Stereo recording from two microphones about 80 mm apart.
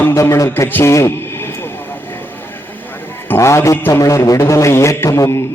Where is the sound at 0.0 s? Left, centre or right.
Left.